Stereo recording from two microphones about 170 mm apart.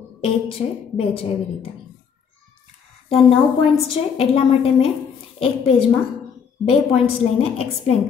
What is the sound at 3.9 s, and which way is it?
A woman's voice, 35° left (ahead or behind).